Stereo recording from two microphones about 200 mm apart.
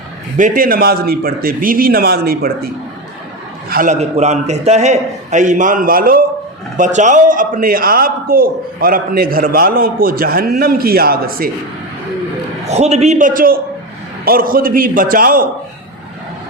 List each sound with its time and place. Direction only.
0.3 s a man's voice: 40° right (ahead or behind)
3.7 s a man's voice: 45° right (ahead or behind)
4.0 s a man's voice: 35° right (ahead or behind)
12.6 s a man's voice: 35° right (ahead or behind)